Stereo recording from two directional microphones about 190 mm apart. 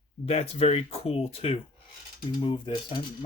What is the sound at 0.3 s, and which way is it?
Speech, 35° left (ahead or behind).